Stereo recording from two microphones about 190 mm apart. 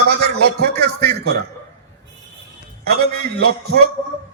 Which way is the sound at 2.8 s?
55° right (ahead or behind).